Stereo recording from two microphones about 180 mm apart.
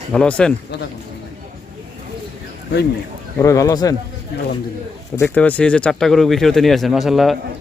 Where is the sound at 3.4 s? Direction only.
20° left (ahead or behind).